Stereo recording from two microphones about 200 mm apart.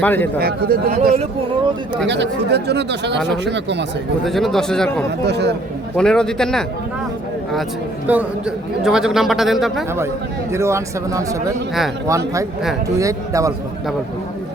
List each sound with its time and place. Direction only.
0.0 s a man's voice: 10° left (ahead or behind)
0.3 s speech: 50° right (ahead or behind)
2.0 s speech: 60° right (ahead or behind)
4.3 s a man's voice: centre (ahead or behind)
5.2 s speech: 55° right (ahead or behind)
6.0 s a man's voice: 5° left (ahead or behind)
8.0 s a man's voice: 5° right (ahead or behind)
10.5 s speech: 15° right (ahead or behind)